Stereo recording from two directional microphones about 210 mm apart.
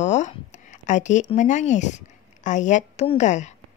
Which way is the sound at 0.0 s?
35° left (ahead or behind).